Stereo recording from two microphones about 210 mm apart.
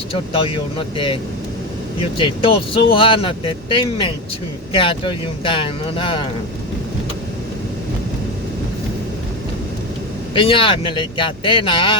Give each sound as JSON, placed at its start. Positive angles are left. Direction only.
{"t": 0.1, "sound": "speech", "side_deg": 25}
{"t": 10.3, "sound": "speech", "side_deg": 25}